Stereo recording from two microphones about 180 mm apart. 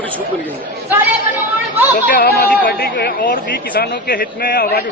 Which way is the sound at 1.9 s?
50° left (ahead or behind).